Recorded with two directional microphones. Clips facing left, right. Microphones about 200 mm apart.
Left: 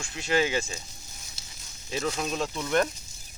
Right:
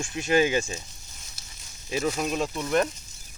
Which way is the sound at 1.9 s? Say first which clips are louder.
Right 3 dB; 10° right (ahead or behind).